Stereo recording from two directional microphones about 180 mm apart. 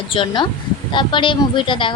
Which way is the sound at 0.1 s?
25° left (ahead or behind).